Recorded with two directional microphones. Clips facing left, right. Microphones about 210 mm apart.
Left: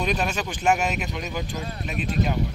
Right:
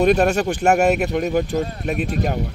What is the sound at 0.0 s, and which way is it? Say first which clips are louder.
Speech: right 10 dB; 55° right (ahead or behind).